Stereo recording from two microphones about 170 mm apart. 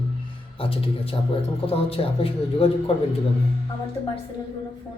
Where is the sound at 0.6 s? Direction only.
35° left (ahead or behind).